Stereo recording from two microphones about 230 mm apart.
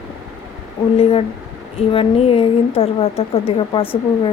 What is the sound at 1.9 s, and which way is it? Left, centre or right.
A woman's voice, left.